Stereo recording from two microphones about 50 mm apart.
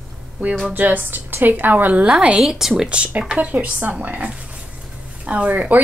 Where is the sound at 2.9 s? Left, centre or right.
Right.